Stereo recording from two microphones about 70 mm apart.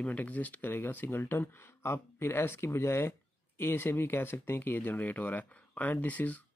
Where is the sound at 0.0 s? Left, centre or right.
Left.